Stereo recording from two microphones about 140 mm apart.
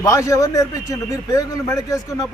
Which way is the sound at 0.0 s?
20° left (ahead or behind).